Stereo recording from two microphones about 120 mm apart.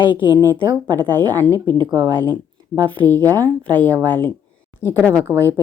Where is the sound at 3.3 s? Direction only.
15° left (ahead or behind).